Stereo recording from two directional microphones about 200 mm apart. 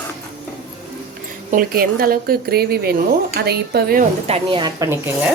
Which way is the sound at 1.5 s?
45° right (ahead or behind).